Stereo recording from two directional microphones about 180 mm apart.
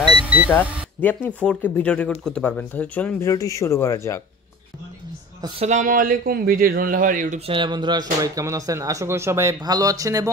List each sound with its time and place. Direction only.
0.0 s vehicle: 5° right (ahead or behind)
1.0 s speech: 5° left (ahead or behind)
5.6 s a man's voice: 40° right (ahead or behind)
7.4 s speech: 25° right (ahead or behind)